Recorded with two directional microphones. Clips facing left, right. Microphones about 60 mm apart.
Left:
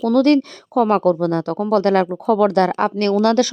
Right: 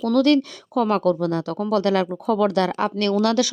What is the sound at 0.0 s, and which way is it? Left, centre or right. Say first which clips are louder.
Speech: left 3 dB; left.